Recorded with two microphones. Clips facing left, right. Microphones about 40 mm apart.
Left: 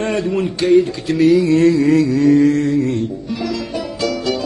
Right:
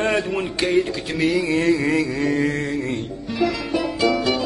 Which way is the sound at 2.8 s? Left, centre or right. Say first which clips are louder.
Left 6 dB; centre.